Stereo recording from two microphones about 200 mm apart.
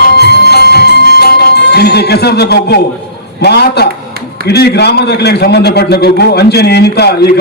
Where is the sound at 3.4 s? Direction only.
55° left (ahead or behind).